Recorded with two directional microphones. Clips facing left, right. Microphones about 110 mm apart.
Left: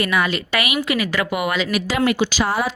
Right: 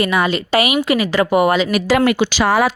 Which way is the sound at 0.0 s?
30° right (ahead or behind).